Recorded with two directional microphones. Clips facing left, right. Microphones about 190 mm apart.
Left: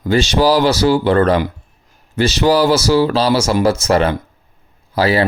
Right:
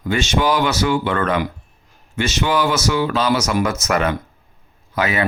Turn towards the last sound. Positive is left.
turn(degrees=35)  # may be behind; listen again after turning